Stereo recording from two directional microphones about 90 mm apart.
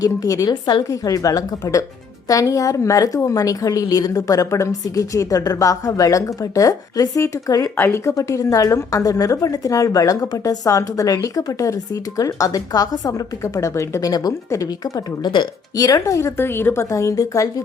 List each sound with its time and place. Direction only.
0.0 s a woman's voice: 40° left (ahead or behind)
7.8 s a woman's voice: 30° left (ahead or behind)
14.1 s a woman's voice: 45° left (ahead or behind)
15.2 s speech: 55° left (ahead or behind)
15.8 s a woman's voice: 40° left (ahead or behind); by 16.8 s 25° left (ahead or behind)
16.9 s a woman's voice: 35° left (ahead or behind)